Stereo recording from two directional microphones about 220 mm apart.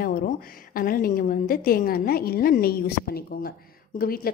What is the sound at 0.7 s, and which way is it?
A woman's voice, 40° left (ahead or behind).